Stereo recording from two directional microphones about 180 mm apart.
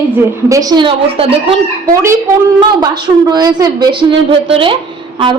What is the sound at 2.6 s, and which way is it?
A woman's voice, 25° right (ahead or behind).